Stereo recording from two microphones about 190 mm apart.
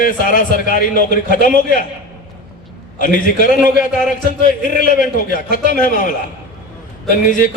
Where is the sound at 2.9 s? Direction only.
45° left (ahead or behind).